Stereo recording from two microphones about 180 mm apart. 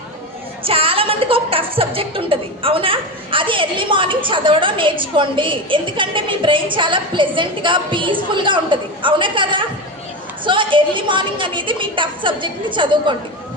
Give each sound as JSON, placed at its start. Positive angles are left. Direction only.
{"t": 0.6, "sound": "a woman's voice", "side_deg": -30}